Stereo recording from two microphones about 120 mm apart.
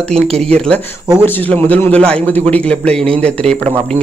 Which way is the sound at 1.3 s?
15° left (ahead or behind).